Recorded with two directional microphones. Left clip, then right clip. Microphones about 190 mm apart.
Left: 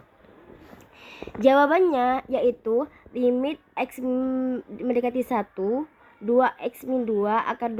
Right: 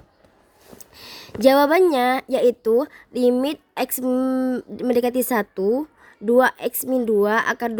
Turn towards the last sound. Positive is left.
turn(degrees=-60)  # may be behind; listen again after turning